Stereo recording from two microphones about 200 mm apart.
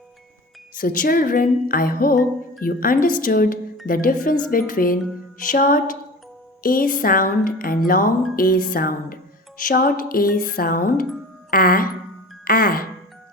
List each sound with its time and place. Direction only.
0.7 s speech: 45° left (ahead or behind)